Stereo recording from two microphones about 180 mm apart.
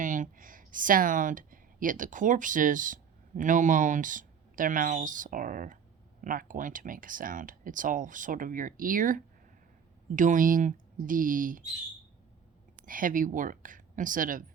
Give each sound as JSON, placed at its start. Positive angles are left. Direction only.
{"t": 0.0, "sound": "speech", "side_deg": -45}
{"t": 12.8, "sound": "speech", "side_deg": -50}